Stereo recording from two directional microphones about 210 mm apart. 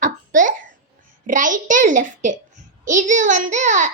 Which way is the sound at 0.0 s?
40° right (ahead or behind).